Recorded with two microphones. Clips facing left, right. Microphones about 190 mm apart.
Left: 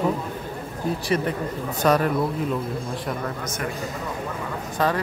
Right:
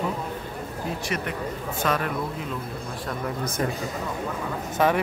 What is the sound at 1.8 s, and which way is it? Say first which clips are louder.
Speech: left 6 dB; 40° left (ahead or behind).